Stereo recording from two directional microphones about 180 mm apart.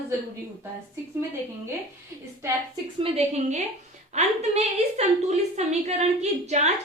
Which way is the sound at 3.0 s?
30° right (ahead or behind).